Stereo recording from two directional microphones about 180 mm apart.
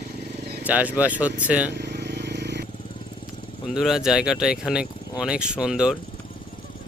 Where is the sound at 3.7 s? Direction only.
Centre (ahead or behind).